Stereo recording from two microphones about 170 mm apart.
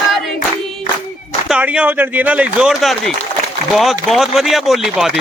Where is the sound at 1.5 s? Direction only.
5° right (ahead or behind).